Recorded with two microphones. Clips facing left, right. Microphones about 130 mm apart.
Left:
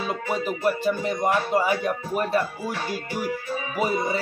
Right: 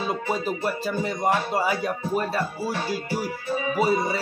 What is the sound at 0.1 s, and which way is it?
Music, 35° right (ahead or behind).